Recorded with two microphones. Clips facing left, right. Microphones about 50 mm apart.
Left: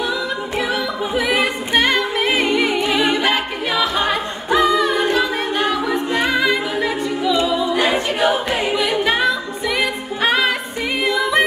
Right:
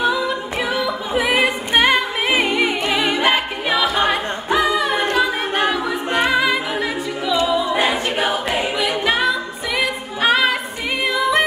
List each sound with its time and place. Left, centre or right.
1.1 s music: centre
3.1 s choir: centre
4.1 s a capella: centre
6.2 s a capella: centre
8.7 s music: centre
11.1 s yodeling: centre